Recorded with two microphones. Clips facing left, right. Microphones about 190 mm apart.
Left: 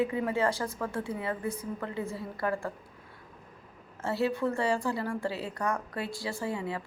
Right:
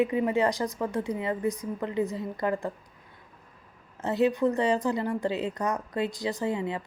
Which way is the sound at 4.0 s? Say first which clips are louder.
Right 5 dB; 20° right (ahead or behind).